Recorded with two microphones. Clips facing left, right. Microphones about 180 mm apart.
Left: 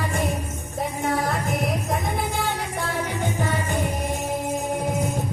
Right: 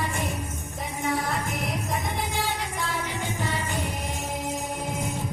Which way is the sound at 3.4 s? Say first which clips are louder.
Left 4 dB; 50° left (ahead or behind).